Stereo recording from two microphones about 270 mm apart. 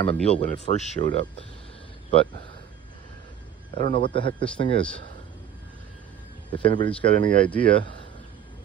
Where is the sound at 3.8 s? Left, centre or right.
Right.